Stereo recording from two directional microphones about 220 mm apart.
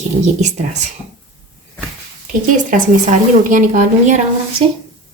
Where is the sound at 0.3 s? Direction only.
30° right (ahead or behind).